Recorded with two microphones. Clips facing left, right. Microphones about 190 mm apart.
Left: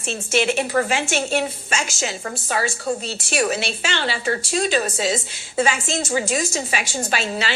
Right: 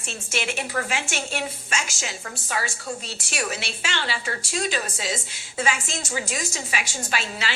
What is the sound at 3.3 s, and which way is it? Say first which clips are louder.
A woman's voice: left 8 dB; 30° left (ahead or behind).